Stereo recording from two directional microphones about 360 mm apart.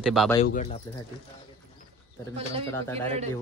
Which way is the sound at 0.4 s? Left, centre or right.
Centre.